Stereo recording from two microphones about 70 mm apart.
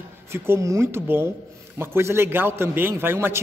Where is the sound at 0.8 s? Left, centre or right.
Right.